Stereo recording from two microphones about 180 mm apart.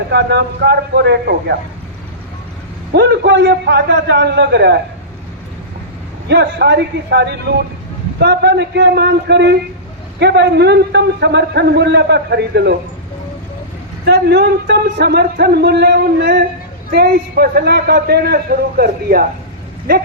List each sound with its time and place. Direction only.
0.1 s a man's voice: 70° right (ahead or behind)
2.9 s a man's voice: 65° right (ahead or behind)
6.2 s a man's voice: 70° right (ahead or behind)
14.0 s a man's voice: 65° right (ahead or behind)